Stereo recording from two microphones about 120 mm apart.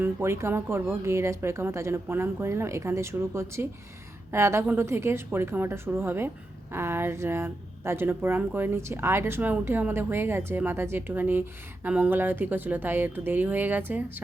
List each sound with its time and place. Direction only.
0.0 s speech: 20° right (ahead or behind)